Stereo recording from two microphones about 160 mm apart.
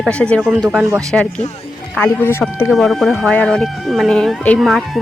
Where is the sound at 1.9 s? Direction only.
10° left (ahead or behind).